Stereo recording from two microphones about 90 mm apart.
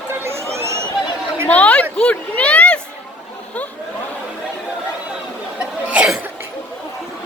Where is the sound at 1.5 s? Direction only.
15° left (ahead or behind).